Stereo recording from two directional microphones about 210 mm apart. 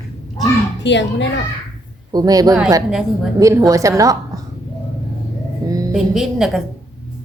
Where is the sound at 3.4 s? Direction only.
15° right (ahead or behind).